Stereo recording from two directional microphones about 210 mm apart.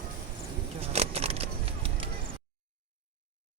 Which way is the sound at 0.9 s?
30° right (ahead or behind).